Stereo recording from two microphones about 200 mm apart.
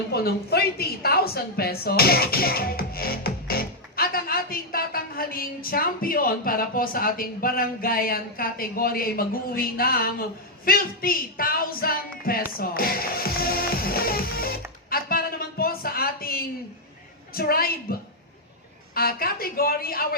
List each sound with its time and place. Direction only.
0.1 s a woman's voice: 50° left (ahead or behind)
10.7 s music: 45° left (ahead or behind)
17.3 s a woman's voice: 50° left (ahead or behind)